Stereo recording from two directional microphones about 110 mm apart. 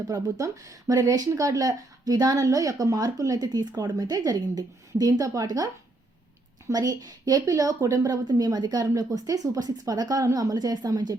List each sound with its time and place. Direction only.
0.1 s speech: 30° right (ahead or behind)
6.7 s speech: 30° right (ahead or behind)